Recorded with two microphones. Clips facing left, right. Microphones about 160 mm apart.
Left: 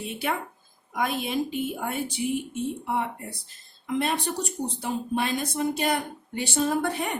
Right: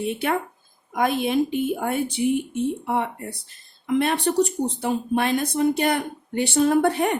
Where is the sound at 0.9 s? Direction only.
55° right (ahead or behind).